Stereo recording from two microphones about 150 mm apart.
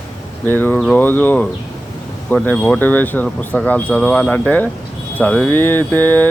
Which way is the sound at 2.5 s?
5° left (ahead or behind).